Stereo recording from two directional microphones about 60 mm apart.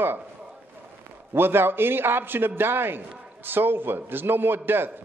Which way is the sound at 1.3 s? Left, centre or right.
Right.